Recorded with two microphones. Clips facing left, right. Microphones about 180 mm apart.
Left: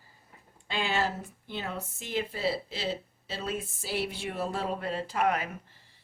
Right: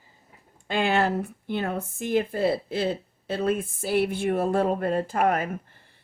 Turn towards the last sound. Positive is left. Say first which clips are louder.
# right 5 dB
turn(degrees=-50)  # may be behind; listen again after turning